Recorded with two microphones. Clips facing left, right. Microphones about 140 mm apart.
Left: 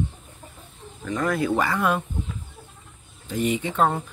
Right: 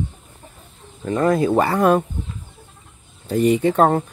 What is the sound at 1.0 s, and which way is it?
Speech, 30° right (ahead or behind).